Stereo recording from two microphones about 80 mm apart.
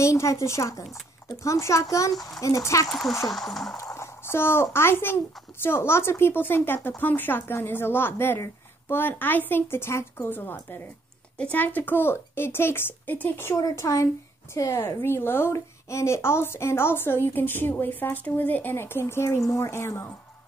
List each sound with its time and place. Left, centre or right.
0.0 s a woman's voice: left
0.8 s speech: centre
1.4 s a woman's voice: left
2.1 s speech: centre
2.4 s a woman's voice: left
2.9 s speech: centre
3.7 s a woman's voice: left